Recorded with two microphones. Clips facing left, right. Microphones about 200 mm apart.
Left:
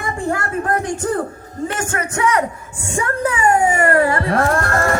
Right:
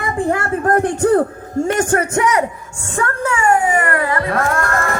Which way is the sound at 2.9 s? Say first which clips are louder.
Even; 15° left (ahead or behind).